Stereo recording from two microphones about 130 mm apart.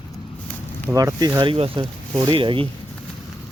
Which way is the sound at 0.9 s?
25° right (ahead or behind).